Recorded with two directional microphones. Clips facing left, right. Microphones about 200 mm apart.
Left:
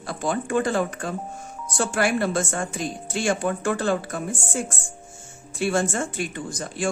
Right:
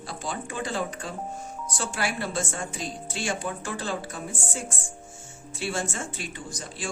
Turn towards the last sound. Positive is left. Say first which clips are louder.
# left 8 dB
turn(degrees=50)  # may be behind; listen again after turning